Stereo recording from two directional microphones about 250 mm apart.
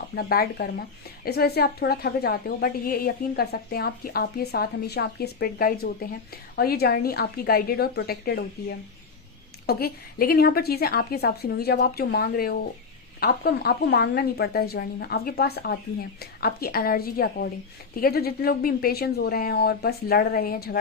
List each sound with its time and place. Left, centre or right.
0.2 s a woman's voice: left
9.6 s a woman's voice: left